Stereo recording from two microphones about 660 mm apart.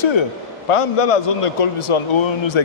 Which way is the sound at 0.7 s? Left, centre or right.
Left.